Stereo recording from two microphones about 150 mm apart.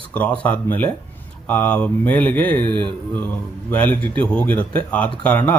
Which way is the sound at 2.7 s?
35° right (ahead or behind).